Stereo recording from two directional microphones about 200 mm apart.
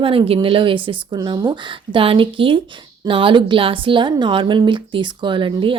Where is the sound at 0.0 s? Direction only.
25° right (ahead or behind).